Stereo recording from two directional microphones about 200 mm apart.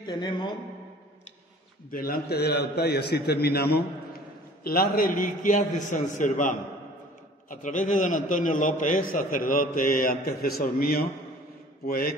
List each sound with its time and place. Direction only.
0.0 s a man's voice: 20° left (ahead or behind)
1.9 s a man's voice: 45° left (ahead or behind)